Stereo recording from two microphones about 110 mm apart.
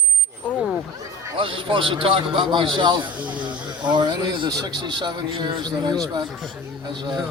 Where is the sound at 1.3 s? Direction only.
50° right (ahead or behind).